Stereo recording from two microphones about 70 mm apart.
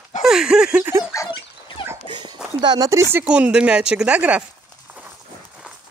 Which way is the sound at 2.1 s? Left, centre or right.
Right.